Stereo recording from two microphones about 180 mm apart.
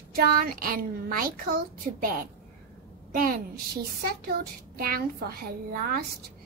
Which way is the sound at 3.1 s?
55° right (ahead or behind).